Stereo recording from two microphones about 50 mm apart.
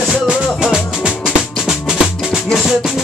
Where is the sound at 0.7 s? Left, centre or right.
Centre.